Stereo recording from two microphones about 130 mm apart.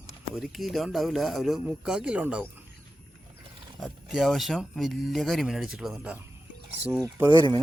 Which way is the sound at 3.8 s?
Centre (ahead or behind).